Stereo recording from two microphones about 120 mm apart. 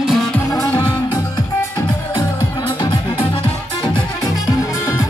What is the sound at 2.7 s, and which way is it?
Music, 40° left (ahead or behind).